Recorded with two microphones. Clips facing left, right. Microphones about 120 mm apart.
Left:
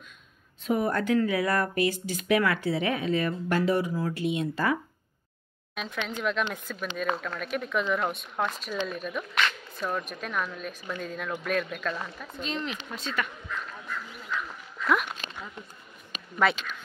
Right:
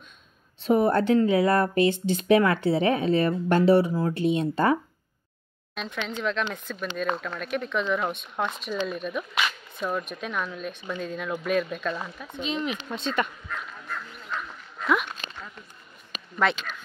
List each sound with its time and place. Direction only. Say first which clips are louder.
0.7 s speech: right 5 dB; 30° right (ahead or behind)
5.8 s speech: right 1 dB; centre (ahead or behind)
12.9 s speech: right 6 dB; 25° right (ahead or behind)
13.5 s duck: right 1 dB; 50° right (ahead or behind)
15.0 s a sound: even; 10° left (ahead or behind)
16.4 s speech: even; 5° left (ahead or behind)